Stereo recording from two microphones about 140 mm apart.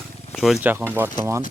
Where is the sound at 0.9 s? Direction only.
20° right (ahead or behind).